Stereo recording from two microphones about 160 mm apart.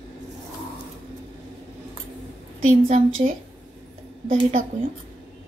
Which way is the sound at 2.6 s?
45° right (ahead or behind).